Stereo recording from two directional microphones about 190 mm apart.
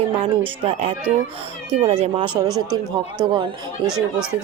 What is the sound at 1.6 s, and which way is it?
Speech, 35° right (ahead or behind).